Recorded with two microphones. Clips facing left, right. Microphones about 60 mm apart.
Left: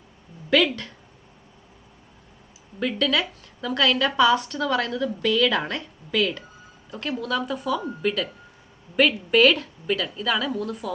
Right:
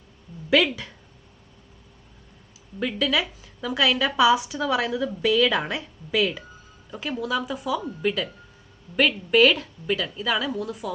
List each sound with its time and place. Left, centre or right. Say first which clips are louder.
0.5 s a woman's voice: even; centre
2.7 s a woman's voice: left 1 dB; centre